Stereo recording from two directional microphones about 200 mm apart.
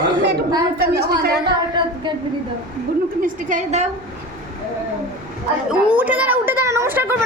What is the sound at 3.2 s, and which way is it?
Speech, 35° right (ahead or behind).